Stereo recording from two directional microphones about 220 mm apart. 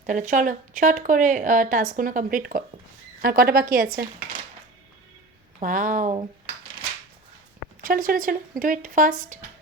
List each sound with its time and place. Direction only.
0.0 s a woman's voice: 35° right (ahead or behind)
5.5 s a woman's voice: 35° right (ahead or behind)
7.8 s a woman's voice: 40° right (ahead or behind)